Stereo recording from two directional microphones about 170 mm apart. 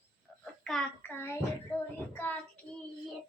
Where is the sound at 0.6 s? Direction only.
5° left (ahead or behind).